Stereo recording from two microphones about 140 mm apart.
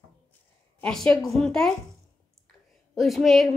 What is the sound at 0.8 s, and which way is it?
Speech, 5° left (ahead or behind).